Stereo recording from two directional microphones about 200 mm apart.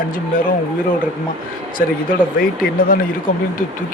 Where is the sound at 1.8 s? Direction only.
45° left (ahead or behind).